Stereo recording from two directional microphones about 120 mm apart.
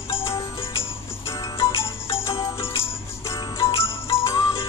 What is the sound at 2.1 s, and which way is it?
Music, 50° left (ahead or behind).